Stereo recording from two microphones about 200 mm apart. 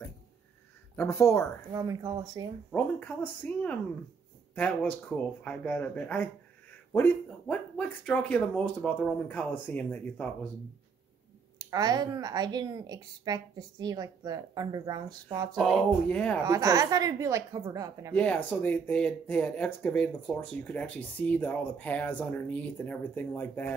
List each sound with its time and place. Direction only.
0.9 s speech: 15° left (ahead or behind)
1.7 s a woman's voice: 15° right (ahead or behind)
2.7 s speech: 5° left (ahead or behind)
11.5 s a woman's voice: 20° right (ahead or behind)
15.5 s speech: centre (ahead or behind)
16.4 s a woman's voice: 15° right (ahead or behind)
18.1 s speech: 5° left (ahead or behind)